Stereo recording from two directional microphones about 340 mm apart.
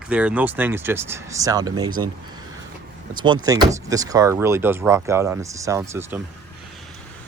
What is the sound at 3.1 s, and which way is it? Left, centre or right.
Speech, centre.